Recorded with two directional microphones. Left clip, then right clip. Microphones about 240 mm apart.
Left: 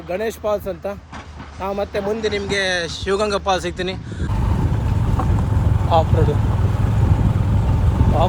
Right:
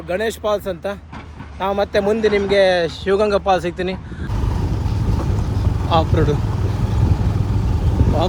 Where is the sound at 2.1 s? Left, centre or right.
Right.